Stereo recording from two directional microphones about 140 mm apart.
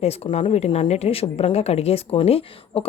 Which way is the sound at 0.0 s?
45° left (ahead or behind).